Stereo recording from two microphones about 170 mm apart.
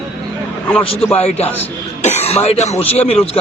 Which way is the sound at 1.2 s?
40° left (ahead or behind).